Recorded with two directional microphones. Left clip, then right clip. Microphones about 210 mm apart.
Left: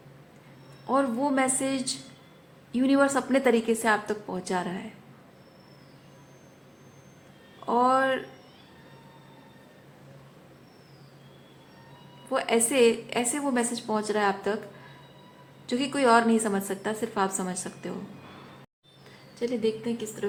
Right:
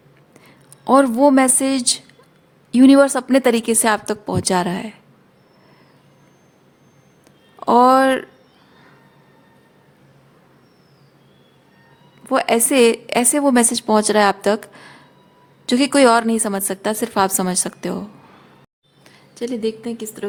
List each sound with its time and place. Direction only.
0.9 s a woman's voice: 60° right (ahead or behind)
7.6 s a sound: 60° right (ahead or behind)
12.3 s a woman's voice: 55° right (ahead or behind)
19.3 s a woman's voice: 55° right (ahead or behind)